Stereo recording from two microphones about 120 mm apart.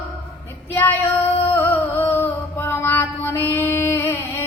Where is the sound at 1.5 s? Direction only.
15° left (ahead or behind).